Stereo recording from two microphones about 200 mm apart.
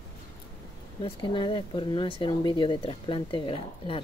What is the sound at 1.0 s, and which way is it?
Speech, 25° left (ahead or behind).